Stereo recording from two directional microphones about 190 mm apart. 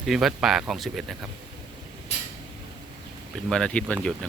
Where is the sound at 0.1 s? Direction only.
Centre (ahead or behind).